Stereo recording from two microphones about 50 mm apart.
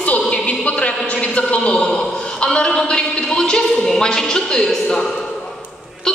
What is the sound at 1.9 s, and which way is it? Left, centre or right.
A man's voice, centre.